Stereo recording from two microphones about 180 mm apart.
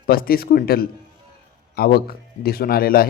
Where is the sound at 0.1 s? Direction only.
55° left (ahead or behind).